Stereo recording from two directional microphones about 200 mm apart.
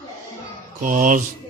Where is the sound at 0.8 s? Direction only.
40° right (ahead or behind).